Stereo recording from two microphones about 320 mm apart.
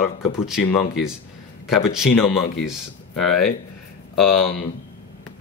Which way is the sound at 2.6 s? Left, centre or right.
Centre.